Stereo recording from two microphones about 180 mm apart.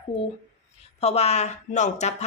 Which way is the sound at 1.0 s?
35° left (ahead or behind).